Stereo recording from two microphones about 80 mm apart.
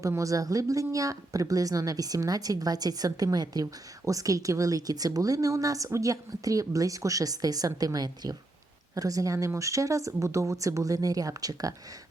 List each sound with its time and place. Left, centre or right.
0.2 s speech: right